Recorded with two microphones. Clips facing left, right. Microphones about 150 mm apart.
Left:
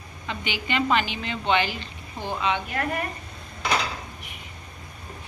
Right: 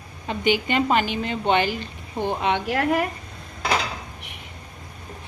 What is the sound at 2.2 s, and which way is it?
Speech, 60° right (ahead or behind).